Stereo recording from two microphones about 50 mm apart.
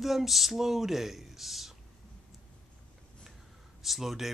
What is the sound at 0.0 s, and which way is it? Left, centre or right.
Speech, centre.